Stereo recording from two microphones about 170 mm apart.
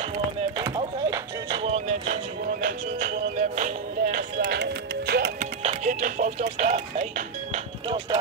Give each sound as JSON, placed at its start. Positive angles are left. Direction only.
{"t": 0.6, "sound": "music", "side_deg": -30}
{"t": 2.6, "sound": "music", "side_deg": -50}
{"t": 4.6, "sound": "music", "side_deg": -80}
{"t": 5.4, "sound": "speech", "side_deg": -40}